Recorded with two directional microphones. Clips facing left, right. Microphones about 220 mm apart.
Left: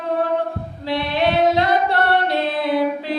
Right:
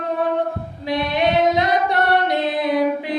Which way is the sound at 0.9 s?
15° right (ahead or behind).